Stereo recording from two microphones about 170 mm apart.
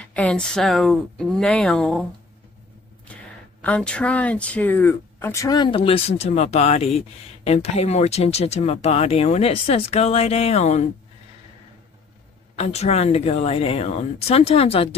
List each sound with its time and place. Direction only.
0.0 s speech: 5° left (ahead or behind)
3.1 s a sound: 5° left (ahead or behind)
3.6 s speech: 5° left (ahead or behind); by 10.9 s 40° left (ahead or behind)
12.5 s speech: 40° left (ahead or behind)